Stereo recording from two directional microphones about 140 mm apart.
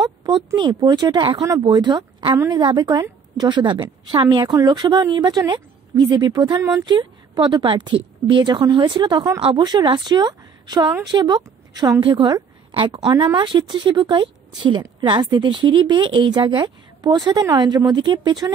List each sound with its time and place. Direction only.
0.2 s a woman's voice: 30° right (ahead or behind)